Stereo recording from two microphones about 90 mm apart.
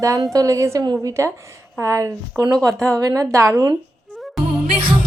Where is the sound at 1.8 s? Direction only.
35° right (ahead or behind).